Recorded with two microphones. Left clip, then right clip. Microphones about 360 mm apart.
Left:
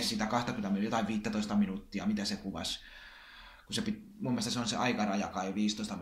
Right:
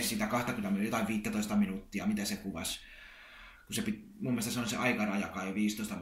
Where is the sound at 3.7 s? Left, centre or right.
Centre.